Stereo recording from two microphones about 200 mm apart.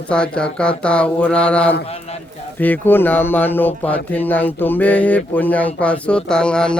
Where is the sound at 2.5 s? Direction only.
10° left (ahead or behind).